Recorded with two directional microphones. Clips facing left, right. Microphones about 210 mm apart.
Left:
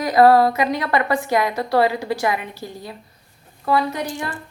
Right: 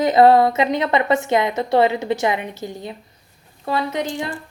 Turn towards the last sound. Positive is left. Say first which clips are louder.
# even
turn(degrees=-20)  # may be behind; listen again after turning